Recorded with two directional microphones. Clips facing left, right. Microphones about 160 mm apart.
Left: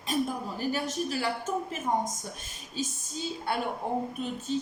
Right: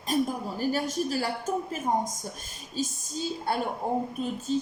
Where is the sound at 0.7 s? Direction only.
40° right (ahead or behind).